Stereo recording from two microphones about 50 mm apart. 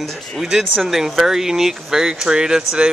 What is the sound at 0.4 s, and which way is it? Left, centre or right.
Speech, centre.